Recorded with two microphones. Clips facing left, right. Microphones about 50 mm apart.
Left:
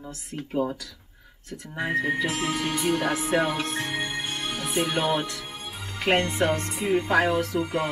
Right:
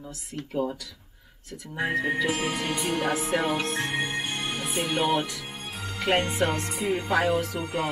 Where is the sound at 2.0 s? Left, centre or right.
Centre.